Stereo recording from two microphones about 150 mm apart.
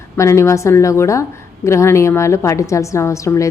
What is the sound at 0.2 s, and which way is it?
A woman's voice, 20° left (ahead or behind).